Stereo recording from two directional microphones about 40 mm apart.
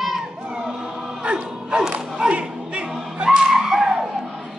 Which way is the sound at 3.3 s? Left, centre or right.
Centre.